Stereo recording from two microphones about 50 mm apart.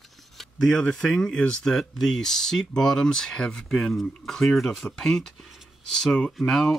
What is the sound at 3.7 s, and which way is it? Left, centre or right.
Speech, centre.